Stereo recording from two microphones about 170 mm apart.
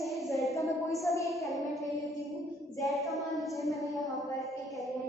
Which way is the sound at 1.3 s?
Centre (ahead or behind).